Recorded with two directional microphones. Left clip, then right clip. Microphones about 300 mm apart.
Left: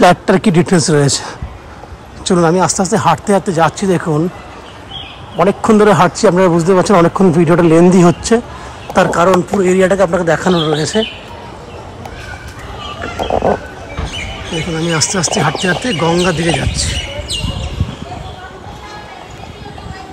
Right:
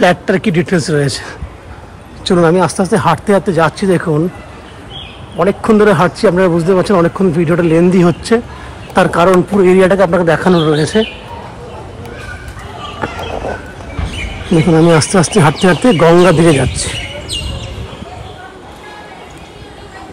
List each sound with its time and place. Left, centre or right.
0.0 s a man's voice: centre
5.4 s a man's voice: centre
14.7 s speech: centre